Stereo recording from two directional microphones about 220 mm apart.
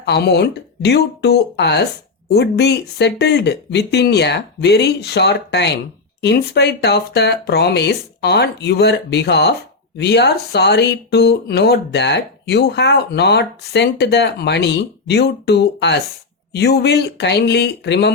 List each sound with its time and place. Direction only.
0.0 s speech: 50° left (ahead or behind)